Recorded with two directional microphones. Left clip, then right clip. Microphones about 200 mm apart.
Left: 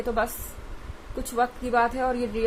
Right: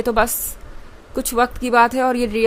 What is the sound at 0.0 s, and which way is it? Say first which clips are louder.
A woman's voice: right 9 dB; 50° right (ahead or behind).